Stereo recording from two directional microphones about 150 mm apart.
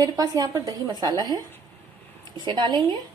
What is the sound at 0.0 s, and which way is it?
A woman's voice, 25° right (ahead or behind).